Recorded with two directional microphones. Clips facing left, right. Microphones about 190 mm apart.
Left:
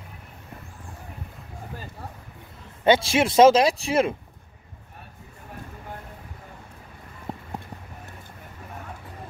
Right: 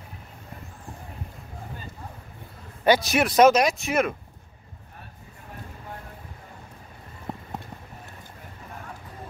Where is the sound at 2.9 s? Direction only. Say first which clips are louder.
Left 1 dB; 25° left (ahead or behind).